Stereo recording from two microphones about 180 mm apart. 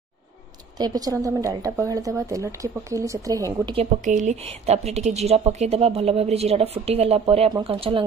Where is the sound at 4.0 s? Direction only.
40° right (ahead or behind).